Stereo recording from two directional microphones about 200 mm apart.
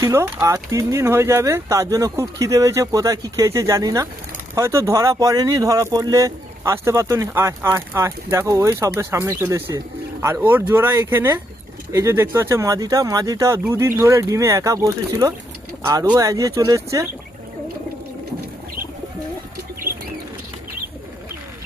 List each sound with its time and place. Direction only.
0.0 s speech: 15° right (ahead or behind)